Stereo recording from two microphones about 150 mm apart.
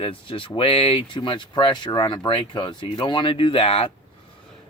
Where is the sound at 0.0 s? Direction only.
35° left (ahead or behind).